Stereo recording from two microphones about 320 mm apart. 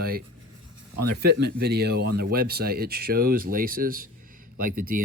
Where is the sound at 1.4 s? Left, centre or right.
Right.